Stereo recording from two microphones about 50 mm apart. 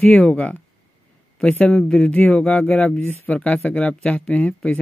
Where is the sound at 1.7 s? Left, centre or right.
Centre.